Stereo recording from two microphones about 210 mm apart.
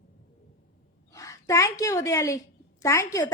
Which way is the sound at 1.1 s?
15° left (ahead or behind).